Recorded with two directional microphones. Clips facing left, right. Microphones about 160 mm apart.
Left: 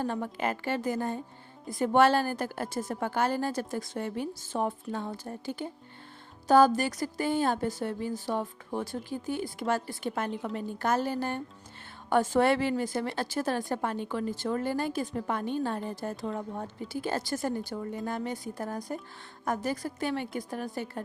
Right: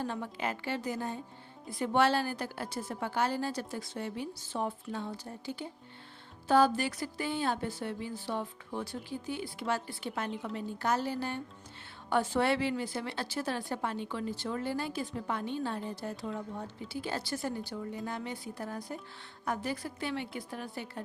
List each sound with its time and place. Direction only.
0.0 s a woman's voice: 50° left (ahead or behind)